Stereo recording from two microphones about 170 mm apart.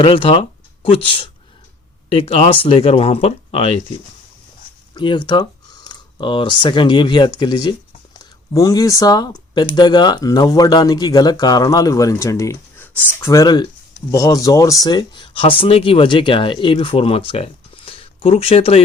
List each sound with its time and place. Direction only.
0.0 s speech: 30° left (ahead or behind)
4.9 s speech: 25° left (ahead or behind)